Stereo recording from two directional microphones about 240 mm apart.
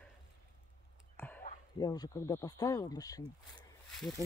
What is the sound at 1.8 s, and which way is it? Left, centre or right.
Speech, centre.